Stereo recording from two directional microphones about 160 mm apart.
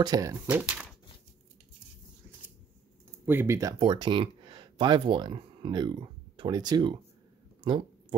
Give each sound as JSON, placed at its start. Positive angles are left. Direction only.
{"t": 0.0, "sound": "speech", "side_deg": -20}
{"t": 0.6, "sound": "speech", "side_deg": -5}
{"t": 3.3, "sound": "speech", "side_deg": -15}
{"t": 3.8, "sound": "speech", "side_deg": -30}